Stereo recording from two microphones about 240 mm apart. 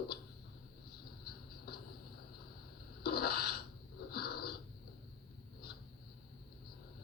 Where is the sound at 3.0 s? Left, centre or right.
Left.